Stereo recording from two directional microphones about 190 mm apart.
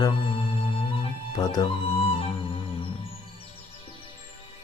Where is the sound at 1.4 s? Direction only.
20° left (ahead or behind).